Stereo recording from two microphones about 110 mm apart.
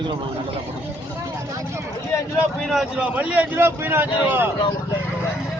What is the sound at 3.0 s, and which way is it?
A man's voice, 10° right (ahead or behind).